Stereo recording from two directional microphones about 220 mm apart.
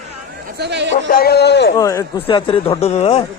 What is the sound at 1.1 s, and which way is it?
Speech, 45° left (ahead or behind).